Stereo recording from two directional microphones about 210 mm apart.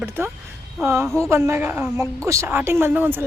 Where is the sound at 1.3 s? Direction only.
15° right (ahead or behind).